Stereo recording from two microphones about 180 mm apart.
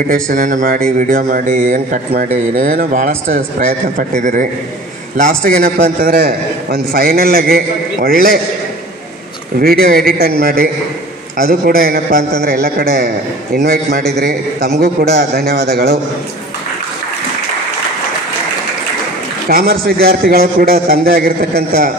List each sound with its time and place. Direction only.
0.1 s a man's voice: 50° right (ahead or behind)
9.6 s a man's voice: 55° right (ahead or behind)
19.5 s a man's voice: 55° right (ahead or behind)